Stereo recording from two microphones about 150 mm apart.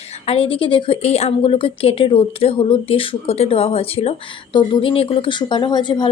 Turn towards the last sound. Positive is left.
turn(degrees=30)  # may be behind; listen again after turning